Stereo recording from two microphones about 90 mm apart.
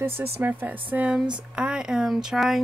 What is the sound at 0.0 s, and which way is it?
Speech, 20° right (ahead or behind).